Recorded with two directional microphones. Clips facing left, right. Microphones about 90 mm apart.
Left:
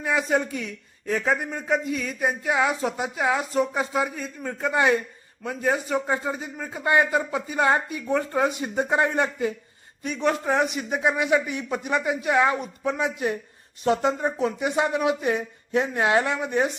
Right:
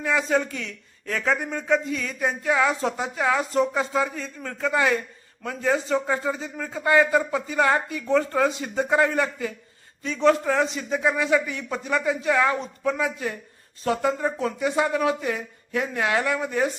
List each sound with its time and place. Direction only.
0.0 s speech: 15° left (ahead or behind)